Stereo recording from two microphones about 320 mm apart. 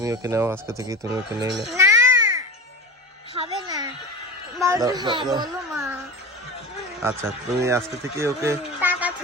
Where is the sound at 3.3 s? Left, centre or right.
Centre.